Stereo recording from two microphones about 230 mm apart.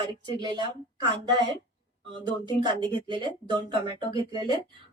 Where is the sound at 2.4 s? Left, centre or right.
Centre.